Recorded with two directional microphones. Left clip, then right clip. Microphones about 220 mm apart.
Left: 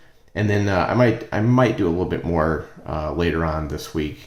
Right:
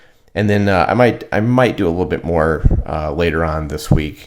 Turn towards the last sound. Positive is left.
turn(degrees=-35)  # may be behind; listen again after turning